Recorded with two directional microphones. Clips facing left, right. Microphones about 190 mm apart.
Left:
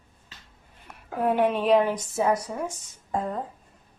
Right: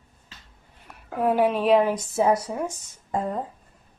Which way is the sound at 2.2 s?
30° right (ahead or behind).